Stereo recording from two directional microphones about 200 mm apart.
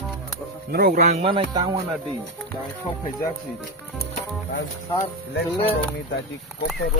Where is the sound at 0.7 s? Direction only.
50° right (ahead or behind).